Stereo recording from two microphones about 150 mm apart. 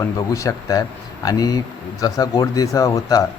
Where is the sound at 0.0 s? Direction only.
20° left (ahead or behind).